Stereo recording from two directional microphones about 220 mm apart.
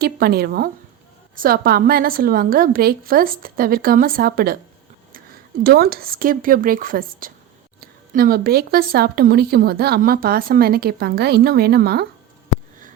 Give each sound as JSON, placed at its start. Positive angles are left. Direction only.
{"t": 0.0, "sound": "a woman's voice", "side_deg": -45}
{"t": 5.6, "sound": "a woman's voice", "side_deg": -45}